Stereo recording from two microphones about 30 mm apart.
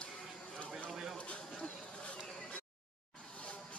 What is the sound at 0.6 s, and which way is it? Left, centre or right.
Run, left.